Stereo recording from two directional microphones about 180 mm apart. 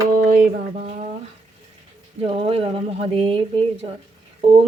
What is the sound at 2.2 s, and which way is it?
Speech, 30° right (ahead or behind).